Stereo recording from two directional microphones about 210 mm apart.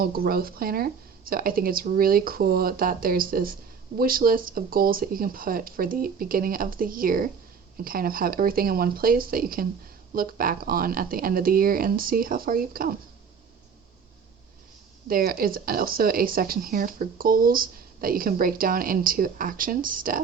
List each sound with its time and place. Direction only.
0.0 s speech: 45° right (ahead or behind)
15.0 s speech: 45° right (ahead or behind)